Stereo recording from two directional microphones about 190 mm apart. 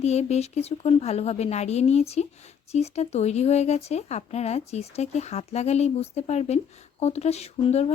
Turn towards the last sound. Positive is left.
turn(degrees=35)  # may be behind; listen again after turning